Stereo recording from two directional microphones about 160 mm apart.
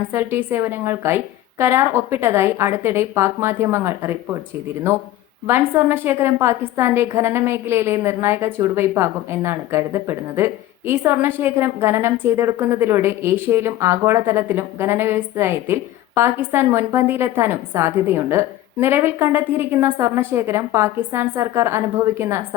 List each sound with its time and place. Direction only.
0.1 s a woman's voice: 15° right (ahead or behind)
5.5 s a woman's voice: 15° right (ahead or behind)